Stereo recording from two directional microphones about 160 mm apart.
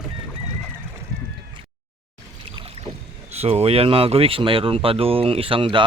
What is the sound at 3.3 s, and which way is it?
Speech, 40° right (ahead or behind).